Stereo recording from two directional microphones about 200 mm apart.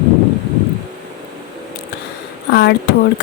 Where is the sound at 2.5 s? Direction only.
55° left (ahead or behind).